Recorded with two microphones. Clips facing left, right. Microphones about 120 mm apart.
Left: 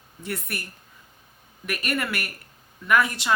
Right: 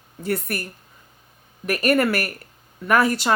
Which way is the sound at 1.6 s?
45° right (ahead or behind).